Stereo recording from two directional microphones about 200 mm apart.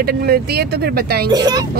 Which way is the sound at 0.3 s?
50° right (ahead or behind).